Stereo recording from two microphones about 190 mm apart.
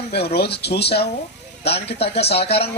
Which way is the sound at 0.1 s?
60° left (ahead or behind).